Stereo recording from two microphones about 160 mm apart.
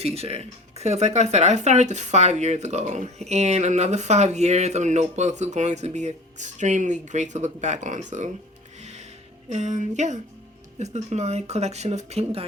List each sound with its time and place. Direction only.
0.0 s speech: 40° right (ahead or behind)
8.8 s music: 45° right (ahead or behind)
9.5 s speech: 50° right (ahead or behind)